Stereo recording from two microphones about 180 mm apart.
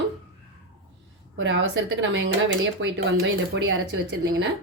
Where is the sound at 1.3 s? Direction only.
90° right.